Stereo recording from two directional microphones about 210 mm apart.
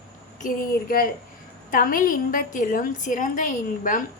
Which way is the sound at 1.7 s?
40° left (ahead or behind).